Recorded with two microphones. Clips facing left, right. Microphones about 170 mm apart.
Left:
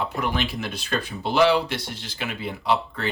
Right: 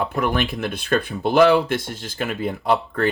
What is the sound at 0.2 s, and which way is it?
Speech, 55° right (ahead or behind).